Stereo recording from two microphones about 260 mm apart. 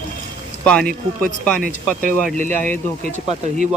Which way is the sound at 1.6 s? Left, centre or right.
Right.